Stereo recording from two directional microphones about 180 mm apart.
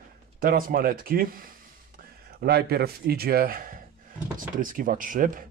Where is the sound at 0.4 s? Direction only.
50° right (ahead or behind).